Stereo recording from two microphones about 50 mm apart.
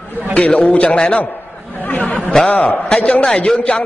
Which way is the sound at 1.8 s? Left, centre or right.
Left.